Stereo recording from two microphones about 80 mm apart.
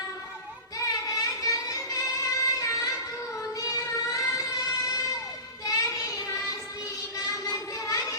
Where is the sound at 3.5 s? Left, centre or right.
Left.